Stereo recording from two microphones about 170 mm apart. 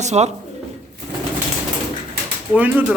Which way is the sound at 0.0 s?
40° right (ahead or behind).